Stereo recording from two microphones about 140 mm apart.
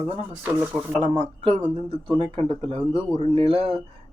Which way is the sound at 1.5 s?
45° right (ahead or behind).